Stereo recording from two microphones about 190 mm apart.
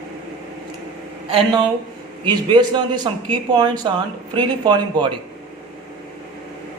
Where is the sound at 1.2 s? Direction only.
30° right (ahead or behind).